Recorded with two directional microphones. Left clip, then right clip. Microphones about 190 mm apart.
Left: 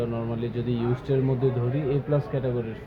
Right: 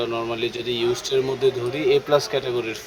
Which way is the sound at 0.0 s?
30° right (ahead or behind).